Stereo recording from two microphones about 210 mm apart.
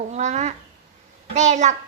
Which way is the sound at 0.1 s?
35° right (ahead or behind).